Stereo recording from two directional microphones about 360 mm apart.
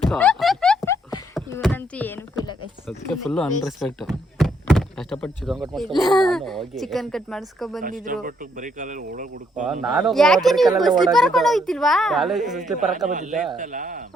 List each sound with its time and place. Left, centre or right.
0.1 s a sound: centre
3.1 s speech: centre
7.8 s speech: right
9.8 s speech: centre
13.5 s speech: right